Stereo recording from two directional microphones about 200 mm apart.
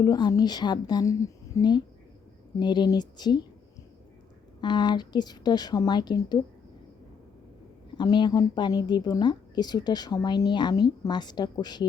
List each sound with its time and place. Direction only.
0.0 s a woman's voice: 20° left (ahead or behind)
4.6 s a woman's voice: 20° left (ahead or behind)
7.9 s a woman's voice: 20° left (ahead or behind)